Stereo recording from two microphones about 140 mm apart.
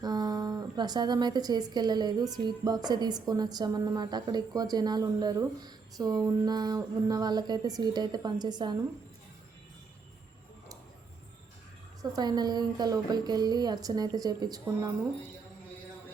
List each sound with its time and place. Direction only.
0.0 s a woman's voice: 30° right (ahead or behind)
12.1 s a woman's voice: 30° right (ahead or behind)